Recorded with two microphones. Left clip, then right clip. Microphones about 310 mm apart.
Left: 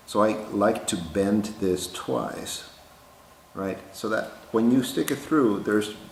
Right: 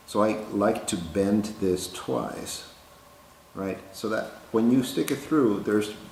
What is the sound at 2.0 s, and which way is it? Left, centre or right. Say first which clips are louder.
Speech: left 2 dB; centre.